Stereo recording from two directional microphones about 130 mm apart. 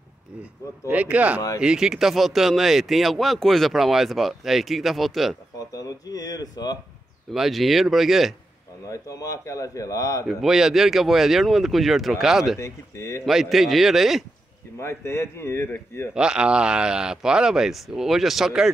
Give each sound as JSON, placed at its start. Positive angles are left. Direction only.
{"t": 0.4, "sound": "speech", "side_deg": -10}
{"t": 5.7, "sound": "speech", "side_deg": 30}
{"t": 7.3, "sound": "speech", "side_deg": 0}
{"t": 8.8, "sound": "speech", "side_deg": 25}
{"t": 10.2, "sound": "speech", "side_deg": -5}
{"t": 12.5, "sound": "speech", "side_deg": 20}
{"t": 13.2, "sound": "speech", "side_deg": 0}
{"t": 14.8, "sound": "speech", "side_deg": 20}
{"t": 16.2, "sound": "speech", "side_deg": -5}